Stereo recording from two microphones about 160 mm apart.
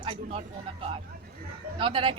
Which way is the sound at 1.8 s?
30° right (ahead or behind).